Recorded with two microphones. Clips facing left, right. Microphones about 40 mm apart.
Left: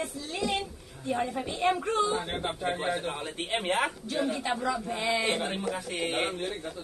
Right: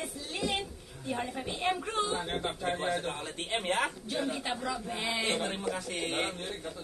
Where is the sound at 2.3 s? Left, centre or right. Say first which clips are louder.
Left 2 dB; centre.